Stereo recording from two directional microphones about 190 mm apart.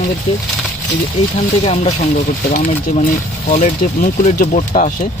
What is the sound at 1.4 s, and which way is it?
Speech, 30° left (ahead or behind).